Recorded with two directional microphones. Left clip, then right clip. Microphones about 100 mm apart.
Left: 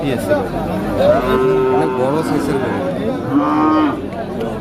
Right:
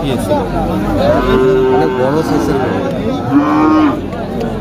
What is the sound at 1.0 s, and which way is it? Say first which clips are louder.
Speech: right 1 dB; 25° left (ahead or behind).